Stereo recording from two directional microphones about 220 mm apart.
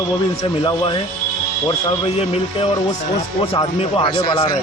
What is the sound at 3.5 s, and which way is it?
Speech, 25° left (ahead or behind).